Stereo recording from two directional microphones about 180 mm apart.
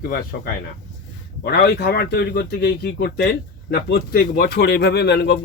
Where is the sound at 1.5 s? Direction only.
65° left (ahead or behind).